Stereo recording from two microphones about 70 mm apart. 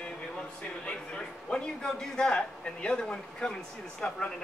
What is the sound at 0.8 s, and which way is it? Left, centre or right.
A man's voice, centre.